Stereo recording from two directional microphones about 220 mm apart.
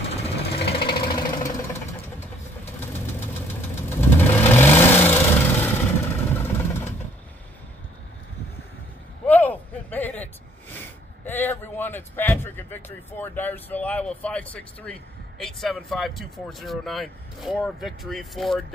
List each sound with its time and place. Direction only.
0.8 s engine: 20° left (ahead or behind)
3.9 s vehicle: 10° left (ahead or behind)
9.2 s a sound: 5° left (ahead or behind)